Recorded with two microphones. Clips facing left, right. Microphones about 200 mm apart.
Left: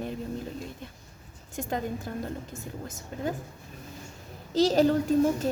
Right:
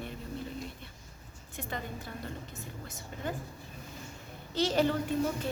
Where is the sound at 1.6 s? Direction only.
45° left (ahead or behind).